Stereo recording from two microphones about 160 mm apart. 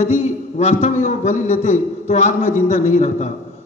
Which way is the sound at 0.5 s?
45° left (ahead or behind).